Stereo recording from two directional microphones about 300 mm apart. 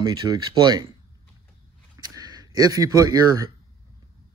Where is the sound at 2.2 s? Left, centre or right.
Centre.